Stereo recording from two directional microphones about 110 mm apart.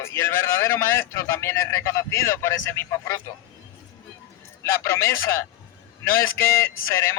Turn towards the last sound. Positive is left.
turn(degrees=25)  # may be behind; listen again after turning